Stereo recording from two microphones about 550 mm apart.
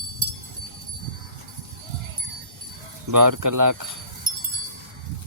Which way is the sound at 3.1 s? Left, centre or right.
Right.